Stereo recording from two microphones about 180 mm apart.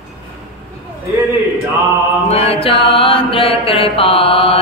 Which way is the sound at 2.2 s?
35° left (ahead or behind).